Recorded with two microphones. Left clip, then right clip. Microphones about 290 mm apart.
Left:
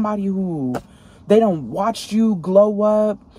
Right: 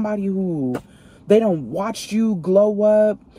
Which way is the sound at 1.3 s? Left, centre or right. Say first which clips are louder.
Left 1 dB; centre.